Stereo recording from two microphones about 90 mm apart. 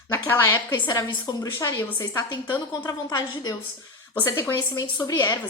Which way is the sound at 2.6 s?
40° left (ahead or behind).